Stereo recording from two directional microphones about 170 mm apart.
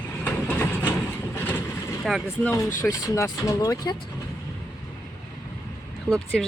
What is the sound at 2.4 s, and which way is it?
Speech, 15° left (ahead or behind).